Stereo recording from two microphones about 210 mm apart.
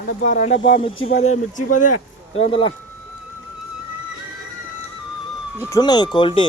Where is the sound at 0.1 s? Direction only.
40° left (ahead or behind); by 2.7 s 25° left (ahead or behind).